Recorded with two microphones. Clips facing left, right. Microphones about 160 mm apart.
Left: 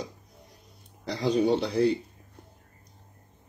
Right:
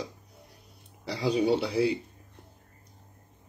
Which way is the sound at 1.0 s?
10° right (ahead or behind).